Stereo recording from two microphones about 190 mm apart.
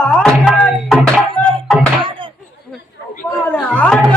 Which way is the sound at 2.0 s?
25° right (ahead or behind).